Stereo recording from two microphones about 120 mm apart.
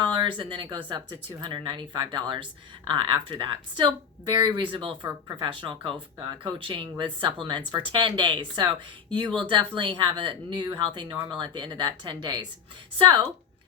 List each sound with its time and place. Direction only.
0.2 s a woman's voice: 45° right (ahead or behind)